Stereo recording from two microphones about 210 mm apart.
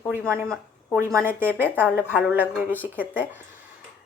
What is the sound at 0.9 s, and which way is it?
A woman's voice, 10° right (ahead or behind).